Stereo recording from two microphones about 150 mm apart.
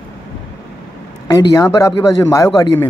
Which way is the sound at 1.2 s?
25° left (ahead or behind).